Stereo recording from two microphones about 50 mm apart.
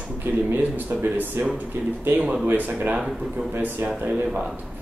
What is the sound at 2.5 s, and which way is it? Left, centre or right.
Speech, right.